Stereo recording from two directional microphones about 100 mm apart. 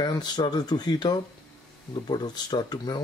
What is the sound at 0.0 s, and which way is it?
Speech, 45° left (ahead or behind).